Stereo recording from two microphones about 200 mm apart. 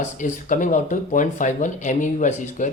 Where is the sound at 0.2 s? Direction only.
40° left (ahead or behind).